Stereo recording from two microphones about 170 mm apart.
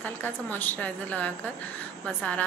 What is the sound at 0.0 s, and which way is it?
A woman's voice, 10° left (ahead or behind).